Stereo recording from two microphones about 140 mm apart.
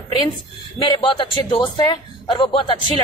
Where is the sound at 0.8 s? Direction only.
35° left (ahead or behind).